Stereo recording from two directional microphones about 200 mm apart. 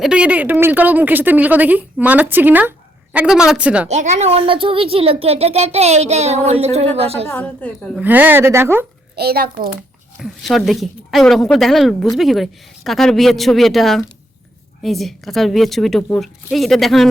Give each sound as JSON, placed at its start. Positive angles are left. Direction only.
{"t": 0.0, "sound": "speech", "side_deg": -5}
{"t": 3.8, "sound": "speech", "side_deg": -35}
{"t": 7.3, "sound": "a woman's voice", "side_deg": 5}
{"t": 8.0, "sound": "speech", "side_deg": -10}
{"t": 9.1, "sound": "a child's voice", "side_deg": -50}
{"t": 10.2, "sound": "a woman's voice", "side_deg": 0}